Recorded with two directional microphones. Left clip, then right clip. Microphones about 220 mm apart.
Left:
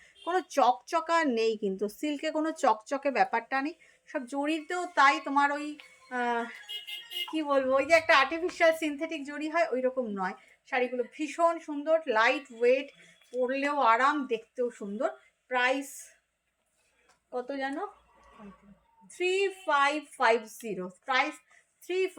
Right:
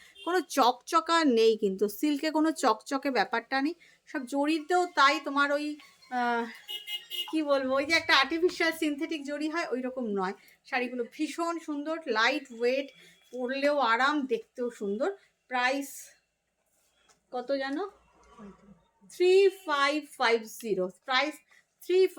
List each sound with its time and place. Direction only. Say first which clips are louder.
0.0 s a woman's voice: right 1 dB; 25° right (ahead or behind)
17.3 s speech: right 2 dB; 20° right (ahead or behind)
19.1 s a woman's voice: right 6 dB; 20° right (ahead or behind)